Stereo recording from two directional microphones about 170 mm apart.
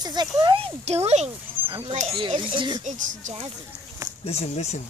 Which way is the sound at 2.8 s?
45° right (ahead or behind).